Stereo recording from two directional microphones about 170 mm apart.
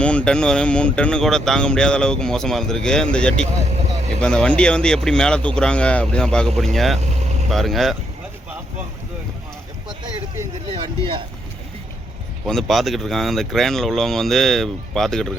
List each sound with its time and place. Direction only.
0.0 s speech: 5° left (ahead or behind)
7.0 s vehicle: 40° right (ahead or behind)
7.5 s speech: centre (ahead or behind)
10.8 s a sound: 30° right (ahead or behind)
12.5 s speech: centre (ahead or behind)